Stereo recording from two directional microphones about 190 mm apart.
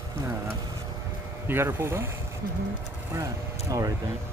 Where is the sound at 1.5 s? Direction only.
10° right (ahead or behind).